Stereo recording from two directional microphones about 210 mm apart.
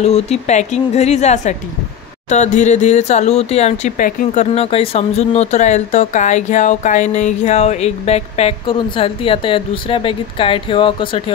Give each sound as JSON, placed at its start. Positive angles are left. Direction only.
{"t": 0.0, "sound": "speech", "side_deg": 30}